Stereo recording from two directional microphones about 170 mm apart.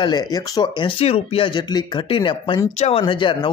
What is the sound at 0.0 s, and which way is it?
Speech, 25° left (ahead or behind).